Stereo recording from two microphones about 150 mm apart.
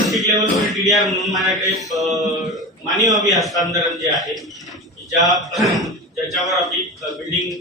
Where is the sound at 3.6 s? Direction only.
25° right (ahead or behind).